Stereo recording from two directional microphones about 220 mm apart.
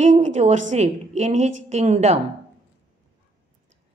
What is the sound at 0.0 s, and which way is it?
A woman's voice, 35° right (ahead or behind).